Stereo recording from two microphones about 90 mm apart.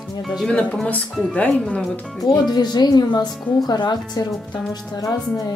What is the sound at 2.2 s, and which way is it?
Speech, 45° left (ahead or behind).